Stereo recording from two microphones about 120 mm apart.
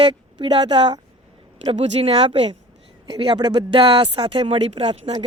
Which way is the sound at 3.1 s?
40° right (ahead or behind).